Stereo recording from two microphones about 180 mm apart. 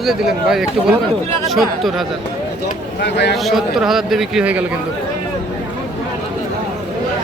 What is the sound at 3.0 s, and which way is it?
Speech, 70° left (ahead or behind).